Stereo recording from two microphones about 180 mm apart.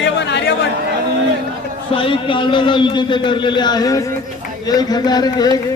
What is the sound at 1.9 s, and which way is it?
Speech, 30° left (ahead or behind).